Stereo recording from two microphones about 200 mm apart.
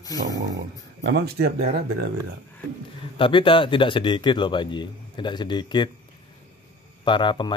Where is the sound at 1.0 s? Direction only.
55° right (ahead or behind).